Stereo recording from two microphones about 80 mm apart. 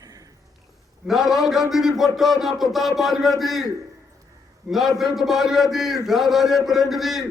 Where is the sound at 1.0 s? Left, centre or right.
Centre.